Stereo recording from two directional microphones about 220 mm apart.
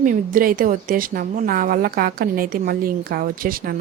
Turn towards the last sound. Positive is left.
turn(degrees=-40)  # may be behind; listen again after turning